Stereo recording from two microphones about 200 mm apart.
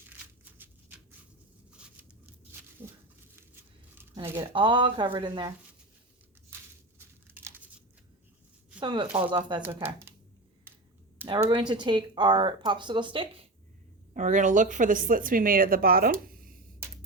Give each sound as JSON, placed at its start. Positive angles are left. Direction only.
{"t": 1.7, "sound": "tearing", "side_deg": -5}
{"t": 2.8, "sound": "a sound", "side_deg": -10}
{"t": 3.3, "sound": "tearing", "side_deg": -10}
{"t": 7.0, "sound": "crumpling", "side_deg": -10}
{"t": 8.8, "sound": "speech", "side_deg": -20}
{"t": 9.6, "sound": "speech", "side_deg": -10}
{"t": 11.3, "sound": "speech", "side_deg": -25}
{"t": 14.1, "sound": "speech", "side_deg": -40}
{"t": 16.2, "sound": "a sound", "side_deg": -45}